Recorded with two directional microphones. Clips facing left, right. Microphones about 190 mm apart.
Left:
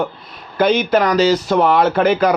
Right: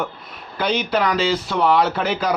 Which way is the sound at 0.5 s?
50° left (ahead or behind).